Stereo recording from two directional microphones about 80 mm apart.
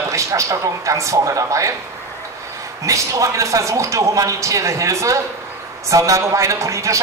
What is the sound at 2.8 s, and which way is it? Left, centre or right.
A man's voice, right.